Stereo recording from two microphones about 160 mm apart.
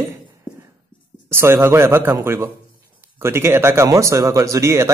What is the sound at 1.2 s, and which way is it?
Speech, 15° right (ahead or behind).